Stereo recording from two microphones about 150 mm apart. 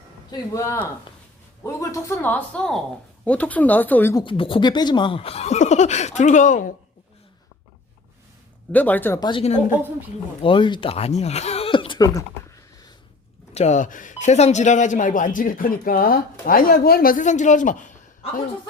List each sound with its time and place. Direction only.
0.3 s speech: 20° left (ahead or behind)
4.1 s speech: 35° left (ahead or behind); by 6.7 s 60° left (ahead or behind)
8.7 s speech: 10° left (ahead or behind)
10.4 s speech: 35° left (ahead or behind)
13.5 s speech: 50° left (ahead or behind)